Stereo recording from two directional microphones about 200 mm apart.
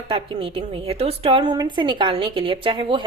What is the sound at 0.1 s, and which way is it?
Speech, 25° right (ahead or behind).